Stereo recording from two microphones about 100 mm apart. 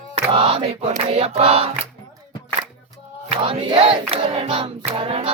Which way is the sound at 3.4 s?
65° right (ahead or behind).